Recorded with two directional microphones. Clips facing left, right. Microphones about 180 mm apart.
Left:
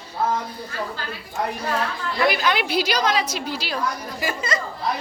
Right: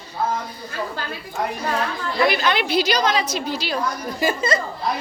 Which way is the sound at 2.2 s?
5° left (ahead or behind).